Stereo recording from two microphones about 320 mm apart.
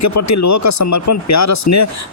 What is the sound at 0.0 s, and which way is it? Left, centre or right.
Speech, left.